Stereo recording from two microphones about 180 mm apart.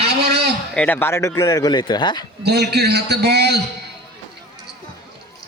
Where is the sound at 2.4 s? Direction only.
65° right (ahead or behind).